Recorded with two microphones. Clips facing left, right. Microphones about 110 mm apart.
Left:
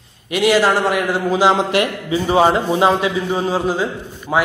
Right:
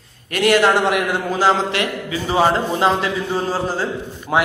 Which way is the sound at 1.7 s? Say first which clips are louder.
Left 4 dB; 25° left (ahead or behind).